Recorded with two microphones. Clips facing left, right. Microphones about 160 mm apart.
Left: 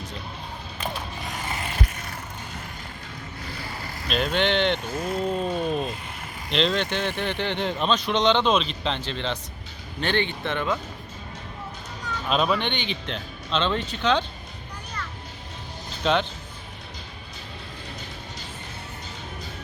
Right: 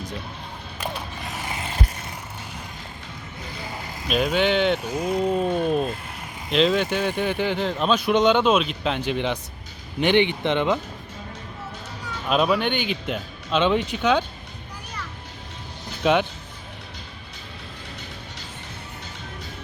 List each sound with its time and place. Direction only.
0.8 s mechanisms: 5° right (ahead or behind)
4.1 s speech: 5° right (ahead or behind)
12.0 s speech: 5° right (ahead or behind)
16.0 s speech: 10° right (ahead or behind)